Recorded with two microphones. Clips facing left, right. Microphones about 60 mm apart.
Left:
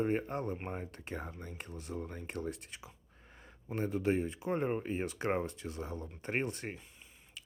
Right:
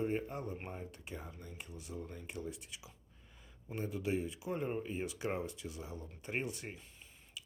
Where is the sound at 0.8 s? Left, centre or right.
Left.